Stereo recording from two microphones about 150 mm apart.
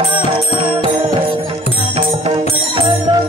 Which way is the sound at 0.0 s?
40° right (ahead or behind).